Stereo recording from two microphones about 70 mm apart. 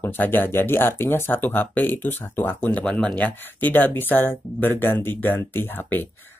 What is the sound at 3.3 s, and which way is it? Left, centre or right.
Speech, left.